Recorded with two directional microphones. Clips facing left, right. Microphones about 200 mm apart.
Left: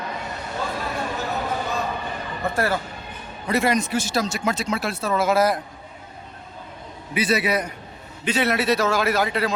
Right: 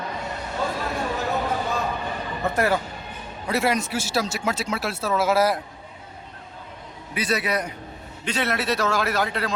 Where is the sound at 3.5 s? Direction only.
5° right (ahead or behind).